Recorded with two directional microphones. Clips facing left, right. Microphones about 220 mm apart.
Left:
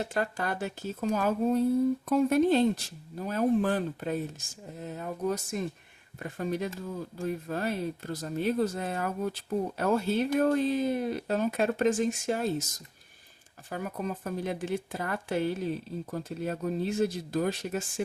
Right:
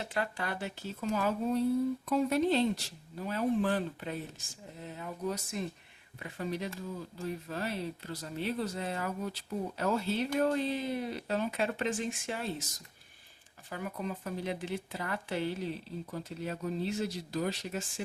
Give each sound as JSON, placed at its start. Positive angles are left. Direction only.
{"t": 0.0, "sound": "speech", "side_deg": 45}
{"t": 13.7, "sound": "speech", "side_deg": 45}